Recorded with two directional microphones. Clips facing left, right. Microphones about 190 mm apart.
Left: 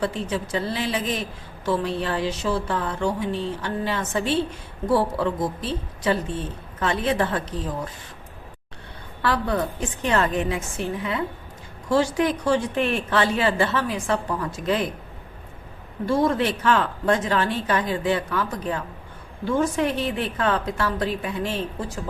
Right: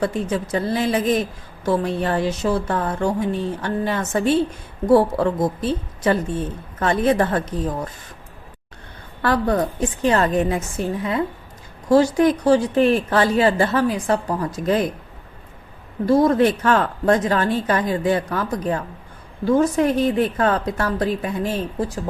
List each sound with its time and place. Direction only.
0.0 s speech: 45° right (ahead or behind)
9.2 s a woman's voice: 45° right (ahead or behind)
16.0 s a woman's voice: 40° right (ahead or behind)